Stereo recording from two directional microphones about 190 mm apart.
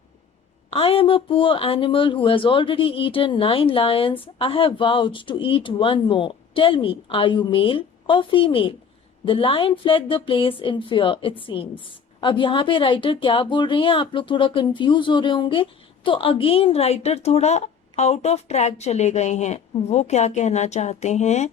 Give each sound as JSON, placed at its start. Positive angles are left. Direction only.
{"t": 0.7, "sound": "speech", "side_deg": 30}